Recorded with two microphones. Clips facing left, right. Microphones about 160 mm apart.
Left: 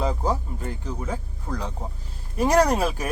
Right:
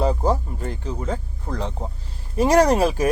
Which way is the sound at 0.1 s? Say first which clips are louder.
Right 4 dB; 20° right (ahead or behind).